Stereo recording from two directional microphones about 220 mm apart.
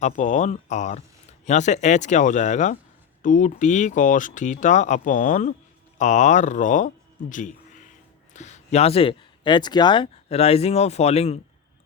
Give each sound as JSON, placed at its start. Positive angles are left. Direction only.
{"t": 0.0, "sound": "speech", "side_deg": 35}